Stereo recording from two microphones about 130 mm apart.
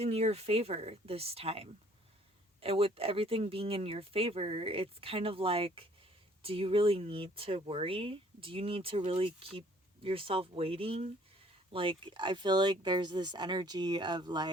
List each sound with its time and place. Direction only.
0.0 s speech: 55° right (ahead or behind); by 14.5 s 35° right (ahead or behind)